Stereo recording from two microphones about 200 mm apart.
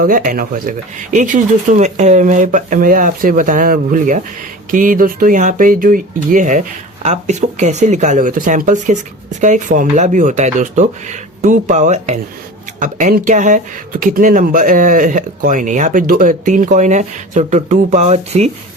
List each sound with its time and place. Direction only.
0.0 s speech: 45° right (ahead or behind)